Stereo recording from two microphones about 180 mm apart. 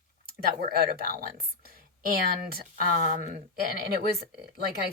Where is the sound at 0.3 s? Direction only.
55° right (ahead or behind).